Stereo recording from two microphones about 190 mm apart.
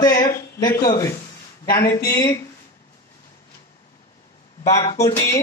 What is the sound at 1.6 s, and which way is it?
Speech, 50° left (ahead or behind).